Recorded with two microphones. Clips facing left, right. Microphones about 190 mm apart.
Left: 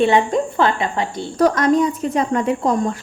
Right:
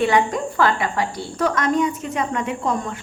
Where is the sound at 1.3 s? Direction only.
35° left (ahead or behind).